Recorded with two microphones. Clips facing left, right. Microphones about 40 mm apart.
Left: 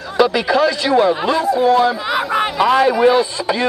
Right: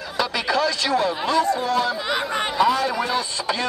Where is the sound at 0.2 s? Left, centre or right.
Centre.